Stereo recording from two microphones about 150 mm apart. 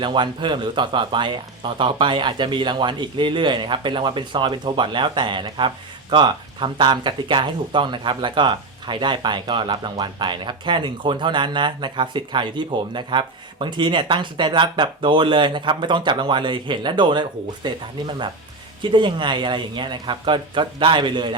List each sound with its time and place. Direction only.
0.0 s speech: 30° right (ahead or behind)